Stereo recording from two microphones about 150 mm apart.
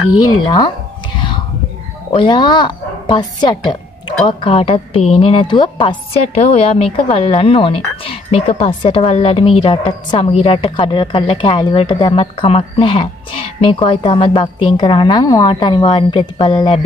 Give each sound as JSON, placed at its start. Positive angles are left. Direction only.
{"t": 0.2, "sound": "speech", "side_deg": 25}
{"t": 2.1, "sound": "a woman's voice", "side_deg": 30}
{"t": 4.3, "sound": "a woman's voice", "side_deg": 35}
{"t": 6.2, "sound": "a woman's voice", "side_deg": 45}